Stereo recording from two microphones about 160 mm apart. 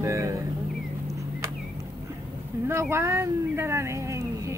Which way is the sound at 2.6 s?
15° right (ahead or behind).